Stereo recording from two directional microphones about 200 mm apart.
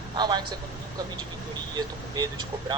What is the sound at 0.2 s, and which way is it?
Speech, 20° right (ahead or behind).